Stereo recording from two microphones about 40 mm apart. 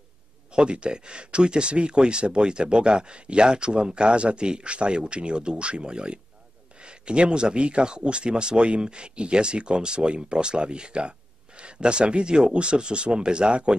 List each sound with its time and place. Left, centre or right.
0.5 s speech: right